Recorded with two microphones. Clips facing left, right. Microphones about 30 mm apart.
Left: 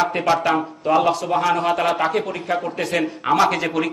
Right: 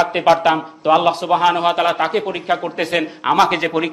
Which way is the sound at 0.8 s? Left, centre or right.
Right.